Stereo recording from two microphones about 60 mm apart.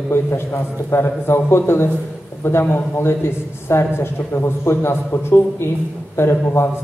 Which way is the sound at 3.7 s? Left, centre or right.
Left.